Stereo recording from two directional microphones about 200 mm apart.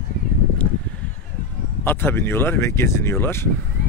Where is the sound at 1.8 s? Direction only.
10° left (ahead or behind).